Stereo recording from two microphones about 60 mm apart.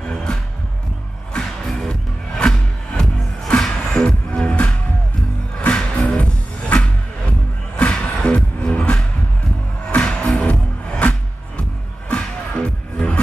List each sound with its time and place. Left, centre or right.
0.0 s music: centre
10.0 s music: centre